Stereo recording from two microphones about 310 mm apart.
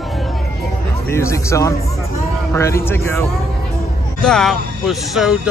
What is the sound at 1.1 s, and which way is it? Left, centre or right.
Speech, centre.